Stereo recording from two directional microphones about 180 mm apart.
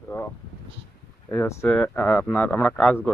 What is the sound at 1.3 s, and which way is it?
Speech, 15° left (ahead or behind).